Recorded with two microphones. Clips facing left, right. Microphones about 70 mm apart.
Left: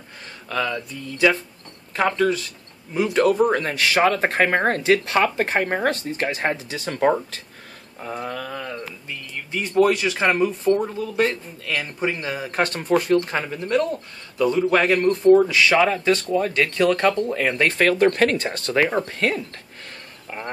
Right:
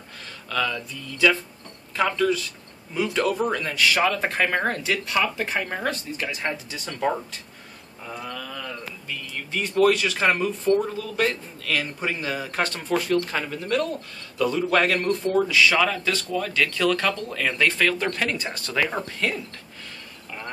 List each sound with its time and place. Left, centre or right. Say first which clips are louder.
0.5 s a man's voice: left 2 dB; left
2.9 s a man's voice: left 5 dB; left
3.5 s speech: left 2 dB; left
4.6 s speech: left 7 dB; left
8.0 s speech: left 5 dB; left
9.5 s speech: left 1 dB; centre
11.0 s a man's voice: left 3 dB; left
12.4 s a man's voice: left 7 dB; left
18.7 s a man's voice: left 5 dB; left